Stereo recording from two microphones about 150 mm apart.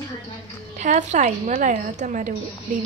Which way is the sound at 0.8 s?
50° right (ahead or behind).